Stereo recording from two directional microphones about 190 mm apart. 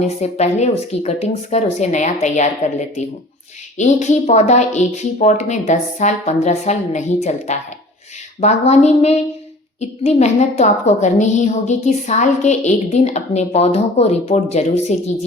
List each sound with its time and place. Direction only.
0.0 s a woman's voice: 35° left (ahead or behind)